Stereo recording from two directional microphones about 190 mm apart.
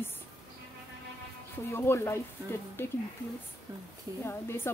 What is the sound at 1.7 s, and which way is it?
Speech, 15° left (ahead or behind).